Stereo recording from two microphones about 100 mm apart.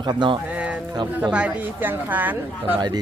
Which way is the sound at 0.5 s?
10° right (ahead or behind).